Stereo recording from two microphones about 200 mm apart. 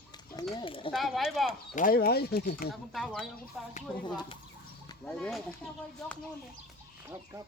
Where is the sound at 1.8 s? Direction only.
45° left (ahead or behind).